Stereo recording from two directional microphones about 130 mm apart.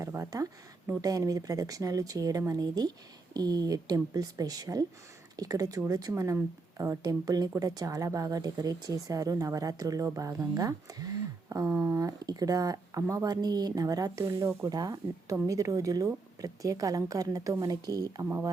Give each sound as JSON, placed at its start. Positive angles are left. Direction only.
{"t": 0.0, "sound": "speech", "side_deg": -25}